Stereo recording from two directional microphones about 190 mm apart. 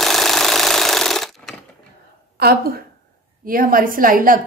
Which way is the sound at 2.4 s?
55° right (ahead or behind).